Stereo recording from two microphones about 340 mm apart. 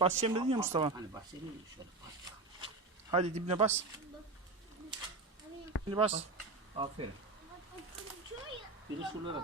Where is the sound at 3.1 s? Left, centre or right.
Centre.